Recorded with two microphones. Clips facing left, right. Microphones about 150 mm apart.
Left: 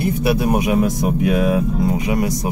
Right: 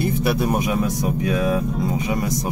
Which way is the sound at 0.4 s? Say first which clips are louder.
Left 3 dB; 65° left (ahead or behind).